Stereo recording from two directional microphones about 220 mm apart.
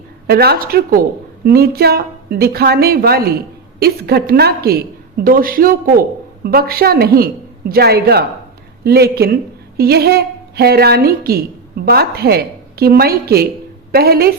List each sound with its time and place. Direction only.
0.3 s a woman's voice: 45° right (ahead or behind)